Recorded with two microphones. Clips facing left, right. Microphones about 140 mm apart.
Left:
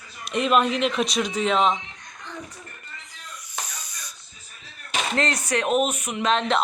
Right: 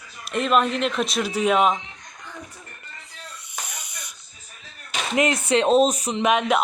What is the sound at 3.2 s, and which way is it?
Snake, 20° right (ahead or behind).